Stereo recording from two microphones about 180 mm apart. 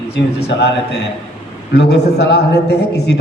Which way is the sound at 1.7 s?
65° left (ahead or behind).